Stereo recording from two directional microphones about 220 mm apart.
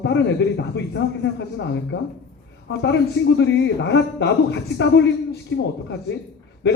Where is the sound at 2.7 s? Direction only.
50° left (ahead or behind).